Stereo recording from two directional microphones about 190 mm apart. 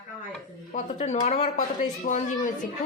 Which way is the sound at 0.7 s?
40° left (ahead or behind).